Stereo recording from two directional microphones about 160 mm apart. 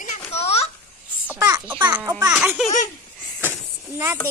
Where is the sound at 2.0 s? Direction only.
20° right (ahead or behind).